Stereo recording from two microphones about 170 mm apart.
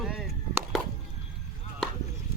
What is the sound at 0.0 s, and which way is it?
Chop, centre (ahead or behind).